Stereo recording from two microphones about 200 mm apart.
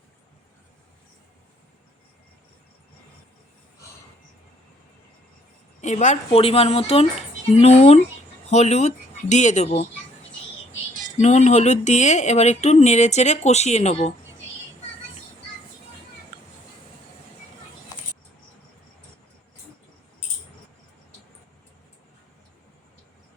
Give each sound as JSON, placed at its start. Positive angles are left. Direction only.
{"t": 5.8, "sound": "speech", "side_deg": 35}
{"t": 11.2, "sound": "speech", "side_deg": 35}